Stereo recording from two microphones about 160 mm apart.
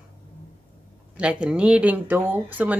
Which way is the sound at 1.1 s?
5° right (ahead or behind).